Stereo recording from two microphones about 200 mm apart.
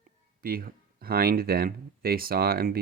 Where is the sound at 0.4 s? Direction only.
45° right (ahead or behind).